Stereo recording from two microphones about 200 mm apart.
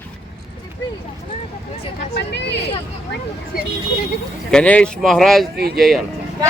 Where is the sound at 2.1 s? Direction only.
60° left (ahead or behind).